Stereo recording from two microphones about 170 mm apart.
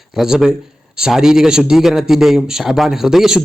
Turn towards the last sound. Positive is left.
turn(degrees=0)  # may be behind; listen again after turning